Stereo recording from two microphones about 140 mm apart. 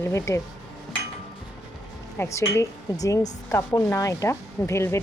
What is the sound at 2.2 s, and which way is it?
Speech, 20° left (ahead or behind).